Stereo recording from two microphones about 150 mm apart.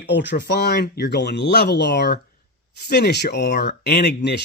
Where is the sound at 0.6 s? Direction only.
90° left.